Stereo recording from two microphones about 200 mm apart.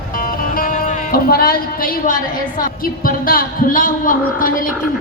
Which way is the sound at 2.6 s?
45° left (ahead or behind).